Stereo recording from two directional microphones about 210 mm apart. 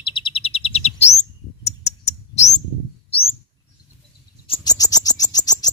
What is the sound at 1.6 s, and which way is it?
Bird, 30° left (ahead or behind).